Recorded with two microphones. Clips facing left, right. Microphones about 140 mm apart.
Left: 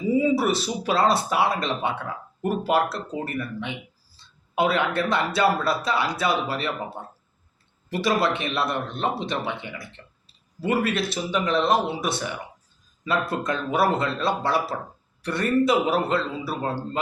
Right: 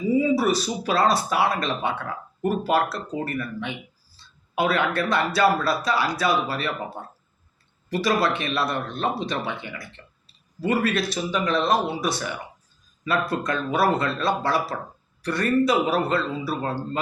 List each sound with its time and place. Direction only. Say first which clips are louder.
0.2 s speech: right 1 dB; 25° left (ahead or behind)
7.9 s speech: even; 25° left (ahead or behind)